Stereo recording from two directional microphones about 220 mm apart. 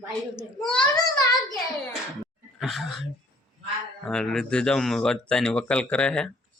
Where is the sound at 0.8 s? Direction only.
15° left (ahead or behind).